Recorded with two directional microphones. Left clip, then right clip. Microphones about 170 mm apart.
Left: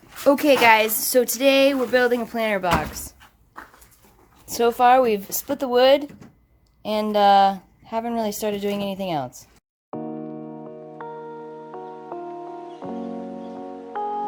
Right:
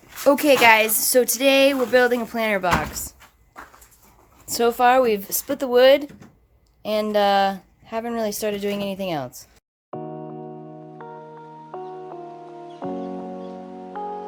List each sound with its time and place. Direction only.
0.3 s a woman's voice: centre (ahead or behind)
4.4 s a woman's voice: 5° right (ahead or behind)
9.9 s music: centre (ahead or behind)
12.8 s music: centre (ahead or behind)